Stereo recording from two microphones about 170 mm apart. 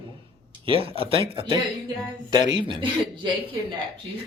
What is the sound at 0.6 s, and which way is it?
Speech, 35° right (ahead or behind).